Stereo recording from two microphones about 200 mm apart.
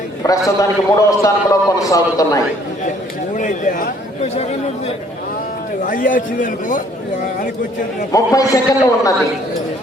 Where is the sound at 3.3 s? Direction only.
40° left (ahead or behind).